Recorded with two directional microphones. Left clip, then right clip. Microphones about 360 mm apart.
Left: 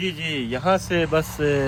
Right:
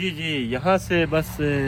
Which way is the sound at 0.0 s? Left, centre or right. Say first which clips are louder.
Even; centre.